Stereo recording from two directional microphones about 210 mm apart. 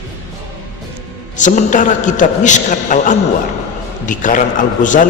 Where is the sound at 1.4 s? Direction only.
35° left (ahead or behind).